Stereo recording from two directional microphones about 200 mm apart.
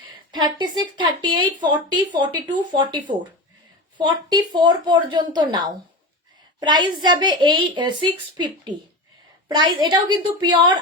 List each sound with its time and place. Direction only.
0.3 s a woman's voice: 20° right (ahead or behind)